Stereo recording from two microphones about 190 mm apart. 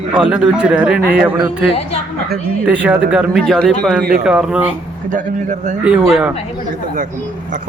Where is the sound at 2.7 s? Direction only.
5° right (ahead or behind).